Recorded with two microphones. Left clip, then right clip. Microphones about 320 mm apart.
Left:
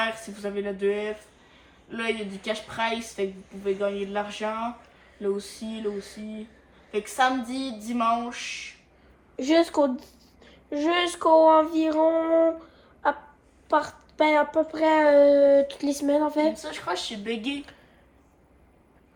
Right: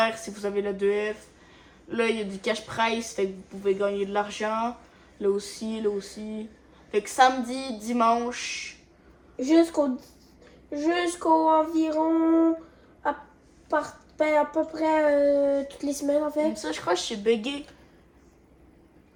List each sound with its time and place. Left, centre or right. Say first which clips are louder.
0.0 s speech: right 3 dB; right
7.4 s speech: right 1 dB; right
9.3 s a child's voice: even; left
13.7 s a child's voice: left 3 dB; left
16.6 s speech: right 3 dB; right